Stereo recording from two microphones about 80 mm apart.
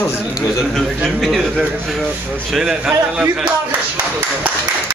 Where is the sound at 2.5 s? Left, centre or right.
Centre.